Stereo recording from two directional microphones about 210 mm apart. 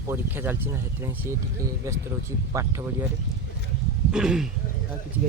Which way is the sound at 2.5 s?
15° right (ahead or behind).